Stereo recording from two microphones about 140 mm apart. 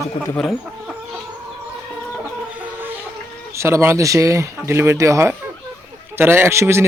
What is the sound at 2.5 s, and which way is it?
Chicken, 10° right (ahead or behind).